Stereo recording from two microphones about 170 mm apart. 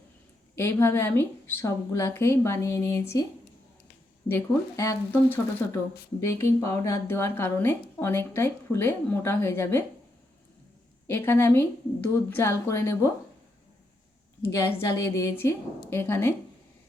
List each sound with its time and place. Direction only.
0.5 s a woman's voice: 15° left (ahead or behind)
4.3 s a woman's voice: 15° left (ahead or behind)
11.0 s a woman's voice: 15° left (ahead or behind)
14.4 s a woman's voice: 15° left (ahead or behind)